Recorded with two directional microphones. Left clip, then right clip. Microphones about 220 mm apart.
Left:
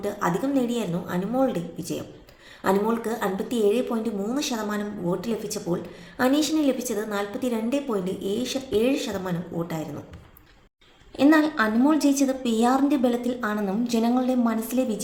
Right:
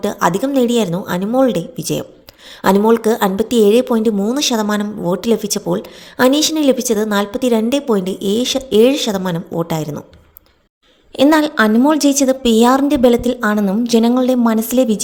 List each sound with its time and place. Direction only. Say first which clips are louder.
0.0 s speech: right 10 dB; 45° right (ahead or behind)
11.2 s a woman's voice: right 8 dB; 40° right (ahead or behind)